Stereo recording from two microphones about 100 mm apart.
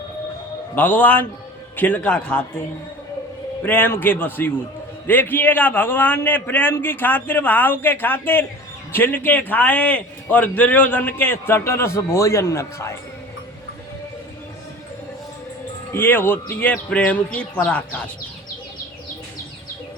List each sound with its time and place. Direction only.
0.8 s a man's voice: 20° left (ahead or behind)
3.6 s a man's voice: 20° left (ahead or behind)
15.9 s speech: 20° left (ahead or behind)